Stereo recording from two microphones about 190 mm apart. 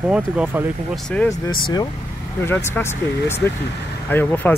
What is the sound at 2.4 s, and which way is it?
Speech, 10° left (ahead or behind).